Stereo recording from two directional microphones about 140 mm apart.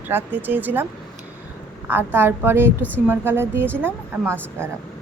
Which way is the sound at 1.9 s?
15° right (ahead or behind).